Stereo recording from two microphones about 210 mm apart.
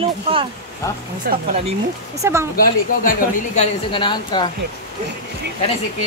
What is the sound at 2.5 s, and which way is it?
Speech, 40° left (ahead or behind).